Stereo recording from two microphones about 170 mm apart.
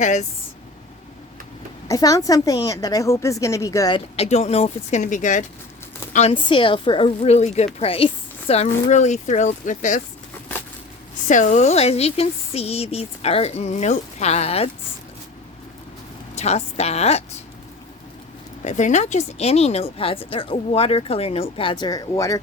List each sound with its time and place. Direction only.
0.0 s speech: 45° left (ahead or behind)
1.9 s a woman's voice: 20° left (ahead or behind)
4.2 s speech: 40° left (ahead or behind)
6.3 s speech: 30° left (ahead or behind); by 10.0 s 50° left (ahead or behind)
11.3 s speech: 45° left (ahead or behind)
16.3 s speech: 40° left (ahead or behind)
18.6 s speech: 45° left (ahead or behind); by 22.4 s 20° left (ahead or behind)